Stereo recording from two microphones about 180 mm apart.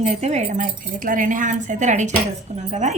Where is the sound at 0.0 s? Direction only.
40° right (ahead or behind).